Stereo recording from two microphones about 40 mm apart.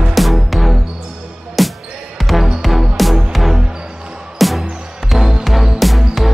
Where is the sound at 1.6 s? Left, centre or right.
Centre.